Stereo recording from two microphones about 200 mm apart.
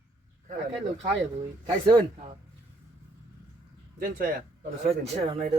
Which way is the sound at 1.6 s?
20° right (ahead or behind).